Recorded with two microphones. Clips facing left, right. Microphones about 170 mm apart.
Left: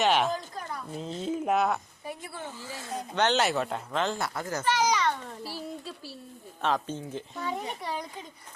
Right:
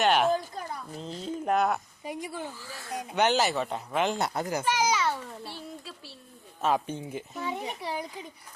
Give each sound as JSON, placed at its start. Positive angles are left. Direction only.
{"t": 0.0, "sound": "speech", "side_deg": 0}
{"t": 2.0, "sound": "a child's voice", "side_deg": -15}
{"t": 2.6, "sound": "speech", "side_deg": 20}
{"t": 2.9, "sound": "a child's voice", "side_deg": -10}
{"t": 3.4, "sound": "speech", "side_deg": 0}
{"t": 3.9, "sound": "a child's voice", "side_deg": -15}
{"t": 6.6, "sound": "a child's voice", "side_deg": -10}